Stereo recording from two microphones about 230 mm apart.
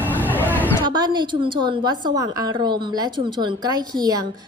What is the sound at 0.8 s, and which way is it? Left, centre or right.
A woman's voice, centre.